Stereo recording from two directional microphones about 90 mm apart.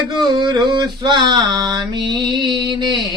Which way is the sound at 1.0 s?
60° right (ahead or behind).